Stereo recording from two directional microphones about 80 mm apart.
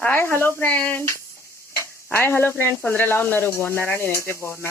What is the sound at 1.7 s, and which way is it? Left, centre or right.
Speech, left.